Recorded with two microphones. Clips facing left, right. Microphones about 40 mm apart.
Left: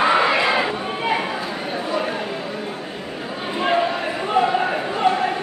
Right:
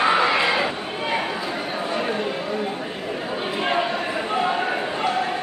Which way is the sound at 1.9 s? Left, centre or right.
Centre.